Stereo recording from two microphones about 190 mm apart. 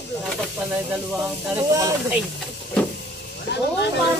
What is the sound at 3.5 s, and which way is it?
Snake, 65° left (ahead or behind).